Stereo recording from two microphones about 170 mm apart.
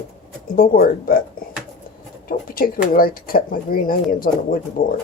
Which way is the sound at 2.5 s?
55° left (ahead or behind).